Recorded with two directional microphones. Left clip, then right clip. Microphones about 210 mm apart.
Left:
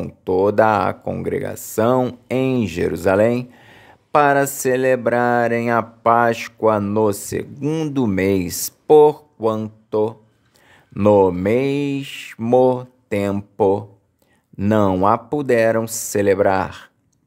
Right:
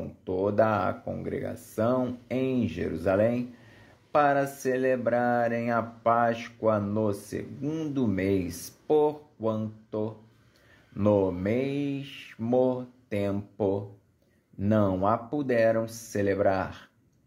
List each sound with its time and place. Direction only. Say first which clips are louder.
0.2 s speech: left 10 dB; 45° left (ahead or behind)